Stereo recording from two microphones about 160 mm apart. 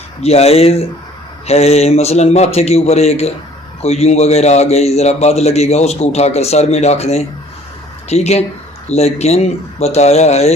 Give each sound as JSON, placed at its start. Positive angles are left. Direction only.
{"t": 0.2, "sound": "a man's voice", "side_deg": 40}